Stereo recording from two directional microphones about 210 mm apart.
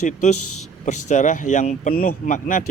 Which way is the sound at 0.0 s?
35° left (ahead or behind).